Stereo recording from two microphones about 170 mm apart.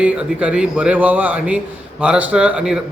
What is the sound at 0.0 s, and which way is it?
A man's voice, 5° right (ahead or behind).